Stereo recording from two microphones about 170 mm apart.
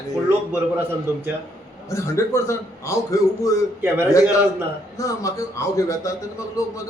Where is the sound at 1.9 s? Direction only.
15° left (ahead or behind).